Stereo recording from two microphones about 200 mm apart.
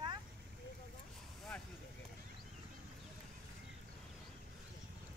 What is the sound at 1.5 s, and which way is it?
Vehicle, 5° left (ahead or behind).